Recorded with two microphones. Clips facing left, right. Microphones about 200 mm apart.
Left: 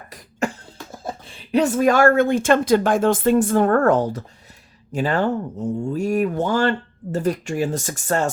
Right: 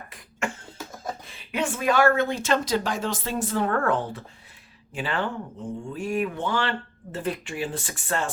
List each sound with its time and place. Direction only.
0.1 s cough: 35° left (ahead or behind)
1.5 s speech: 40° left (ahead or behind)